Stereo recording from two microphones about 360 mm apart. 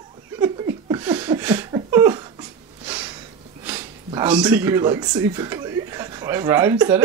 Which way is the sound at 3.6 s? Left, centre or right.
Centre.